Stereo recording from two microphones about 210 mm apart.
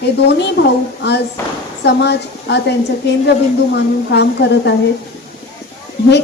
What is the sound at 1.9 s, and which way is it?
Speech, 55° left (ahead or behind).